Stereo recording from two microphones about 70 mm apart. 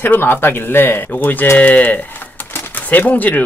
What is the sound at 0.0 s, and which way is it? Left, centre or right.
Speech, left.